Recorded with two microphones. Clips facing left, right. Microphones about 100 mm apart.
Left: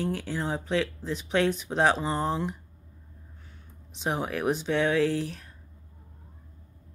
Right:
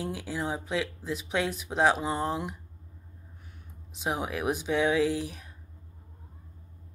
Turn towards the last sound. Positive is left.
turn(degrees=-10)  # may be behind; listen again after turning